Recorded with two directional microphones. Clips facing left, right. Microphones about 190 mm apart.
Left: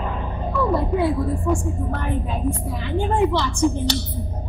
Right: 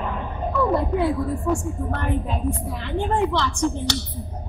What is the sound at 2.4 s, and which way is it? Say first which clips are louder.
A woman's voice: left 2 dB; centre (ahead or behind).